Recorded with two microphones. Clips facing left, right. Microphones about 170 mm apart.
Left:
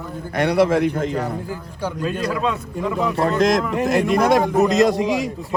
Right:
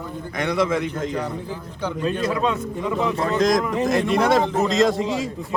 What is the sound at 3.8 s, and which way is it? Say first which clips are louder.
Speech: left 3 dB; 15° left (ahead or behind).